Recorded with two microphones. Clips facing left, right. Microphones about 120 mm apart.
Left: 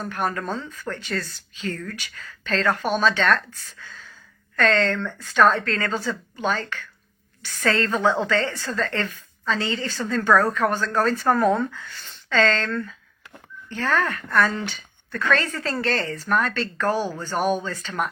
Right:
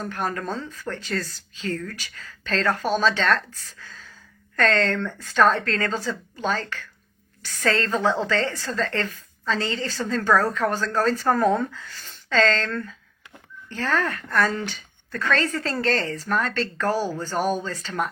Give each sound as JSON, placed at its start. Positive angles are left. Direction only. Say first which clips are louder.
{"t": 0.1, "sound": "a woman's voice", "louder": "left 4 dB", "side_deg": -35}